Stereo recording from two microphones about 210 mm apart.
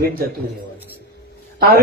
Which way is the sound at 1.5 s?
45° right (ahead or behind).